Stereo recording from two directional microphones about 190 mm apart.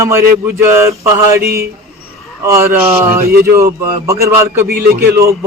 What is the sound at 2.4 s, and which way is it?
A man's voice, 15° right (ahead or behind).